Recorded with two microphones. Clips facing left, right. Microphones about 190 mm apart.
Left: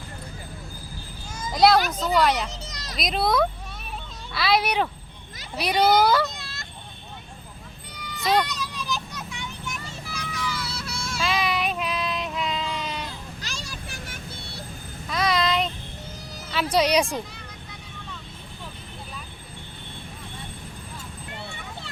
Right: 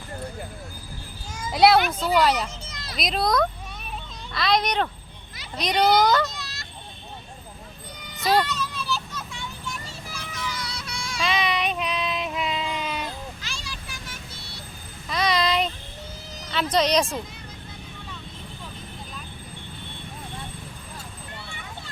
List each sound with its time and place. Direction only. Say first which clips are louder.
1.4 s children playing: right 1 dB; 5° right (ahead or behind)
2.1 s speech: even; 5° right (ahead or behind)
2.5 s children playing: left 1 dB; 40° left (ahead or behind)
3.0 s a child's voice: even; centre (ahead or behind)
6.3 s a sound: right 1 dB; 50° left (ahead or behind)
8.2 s speech: right 1 dB; centre (ahead or behind)
8.4 s child singing: right 2 dB; 15° left (ahead or behind)
10.5 s child singing: left 2 dB; 5° left (ahead or behind)
13.4 s vehicle: left 2 dB; 45° left (ahead or behind)
15.1 s child singing: even; centre (ahead or behind)
16.5 s speech: left 1 dB; 10° left (ahead or behind)